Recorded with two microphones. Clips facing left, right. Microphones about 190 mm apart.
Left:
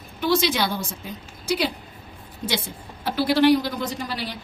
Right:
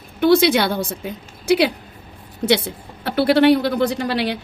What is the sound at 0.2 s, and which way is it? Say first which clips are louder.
A woman's voice: right 7 dB; 60° right (ahead or behind).